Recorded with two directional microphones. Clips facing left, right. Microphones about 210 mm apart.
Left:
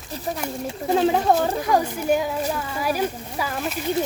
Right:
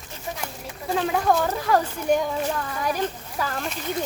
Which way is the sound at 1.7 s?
15° left (ahead or behind).